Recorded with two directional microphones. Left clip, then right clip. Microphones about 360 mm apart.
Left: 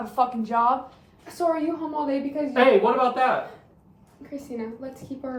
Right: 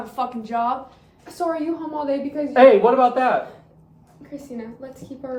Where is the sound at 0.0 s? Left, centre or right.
Centre.